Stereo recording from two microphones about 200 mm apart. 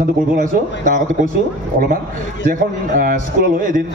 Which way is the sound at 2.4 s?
45° right (ahead or behind).